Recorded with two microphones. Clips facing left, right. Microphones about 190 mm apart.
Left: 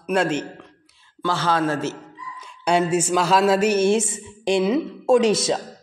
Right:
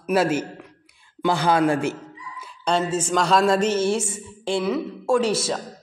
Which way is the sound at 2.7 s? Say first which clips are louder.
Left 3 dB; 10° left (ahead or behind).